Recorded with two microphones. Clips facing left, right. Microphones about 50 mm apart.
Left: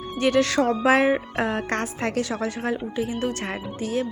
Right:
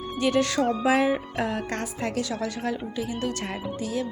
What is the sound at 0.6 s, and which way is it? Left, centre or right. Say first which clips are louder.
Speech: left 2 dB; centre.